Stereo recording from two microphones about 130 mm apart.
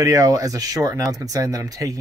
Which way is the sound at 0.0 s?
25° right (ahead or behind).